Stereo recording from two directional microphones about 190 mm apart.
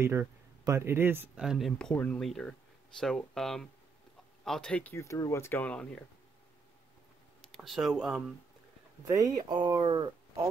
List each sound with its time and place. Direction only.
0.0 s speech: 15° right (ahead or behind); by 6.0 s 5° left (ahead or behind)
7.4 s speech: centre (ahead or behind)
9.0 s speech: 20° right (ahead or behind)